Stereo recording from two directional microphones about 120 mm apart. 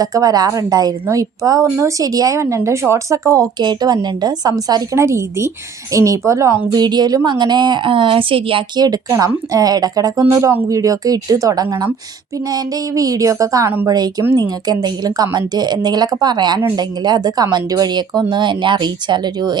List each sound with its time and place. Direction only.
0.0 s speech: 30° right (ahead or behind)